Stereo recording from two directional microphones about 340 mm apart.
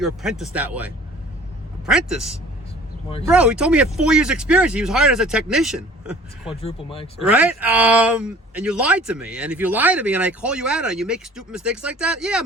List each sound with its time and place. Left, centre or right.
0.0 s speech: centre
6.6 s speech: centre
7.2 s speech: centre